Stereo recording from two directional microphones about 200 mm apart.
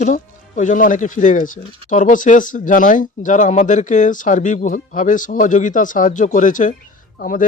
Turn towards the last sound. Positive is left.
turn(degrees=40)  # may be behind; listen again after turning